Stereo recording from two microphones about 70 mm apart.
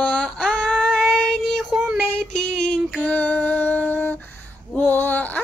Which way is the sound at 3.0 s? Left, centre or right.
Left.